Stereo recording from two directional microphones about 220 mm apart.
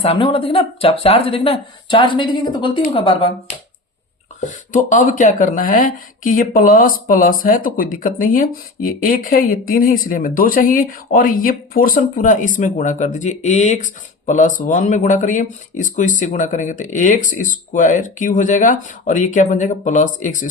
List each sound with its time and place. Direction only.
0.0 s speech: 25° left (ahead or behind)
4.4 s speech: 35° left (ahead or behind)